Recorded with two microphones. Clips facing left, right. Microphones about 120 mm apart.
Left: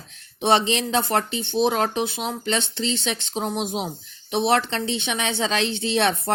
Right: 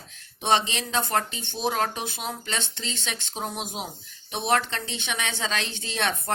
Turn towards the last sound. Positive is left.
turn(degrees=30)  # may be behind; listen again after turning